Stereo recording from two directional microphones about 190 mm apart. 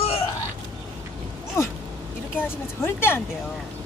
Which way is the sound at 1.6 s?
15° left (ahead or behind).